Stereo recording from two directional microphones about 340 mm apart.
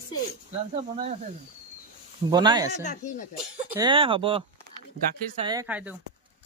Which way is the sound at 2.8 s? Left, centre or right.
Left.